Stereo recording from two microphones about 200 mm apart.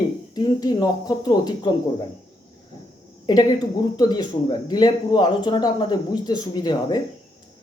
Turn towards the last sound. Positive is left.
turn(degrees=20)  # may be behind; listen again after turning